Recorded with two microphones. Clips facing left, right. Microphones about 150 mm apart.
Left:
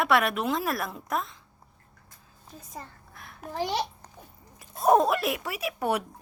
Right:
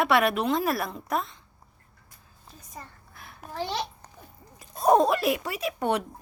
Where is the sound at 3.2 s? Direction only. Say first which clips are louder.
Even; centre (ahead or behind).